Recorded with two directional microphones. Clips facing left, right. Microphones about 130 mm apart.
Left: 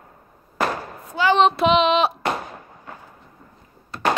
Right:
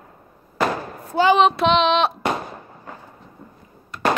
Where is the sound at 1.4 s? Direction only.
Centre (ahead or behind).